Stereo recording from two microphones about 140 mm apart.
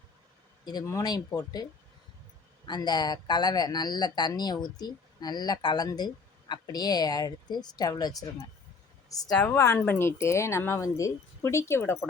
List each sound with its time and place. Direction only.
0.6 s speech: 25° left (ahead or behind)
2.6 s speech: 30° left (ahead or behind)